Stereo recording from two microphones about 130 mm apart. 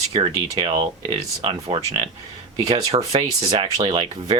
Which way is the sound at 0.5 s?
40° right (ahead or behind).